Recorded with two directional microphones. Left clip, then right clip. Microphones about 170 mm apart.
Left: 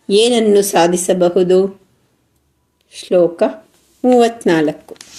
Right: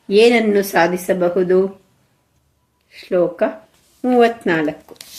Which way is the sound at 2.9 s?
30° left (ahead or behind).